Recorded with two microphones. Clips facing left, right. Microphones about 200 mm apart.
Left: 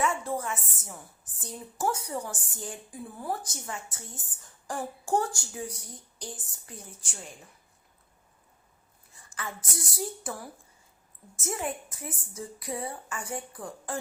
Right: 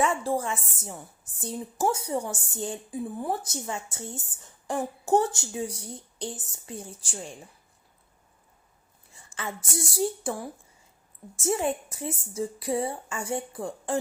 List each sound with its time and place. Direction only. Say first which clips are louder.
0.0 s a woman's voice: right 4 dB; 30° right (ahead or behind)
9.3 s a woman's voice: right 4 dB; 25° right (ahead or behind)